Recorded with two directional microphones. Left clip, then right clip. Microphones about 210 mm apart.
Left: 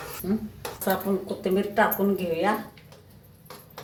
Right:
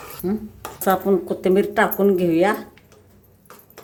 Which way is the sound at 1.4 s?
60° right (ahead or behind).